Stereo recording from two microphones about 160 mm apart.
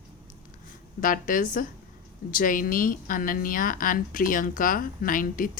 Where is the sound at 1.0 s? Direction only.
55° left (ahead or behind).